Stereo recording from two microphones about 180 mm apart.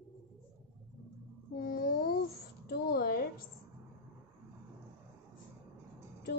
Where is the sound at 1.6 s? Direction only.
55° left (ahead or behind).